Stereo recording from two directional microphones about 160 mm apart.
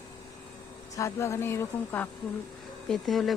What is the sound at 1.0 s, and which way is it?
Speech, 20° left (ahead or behind).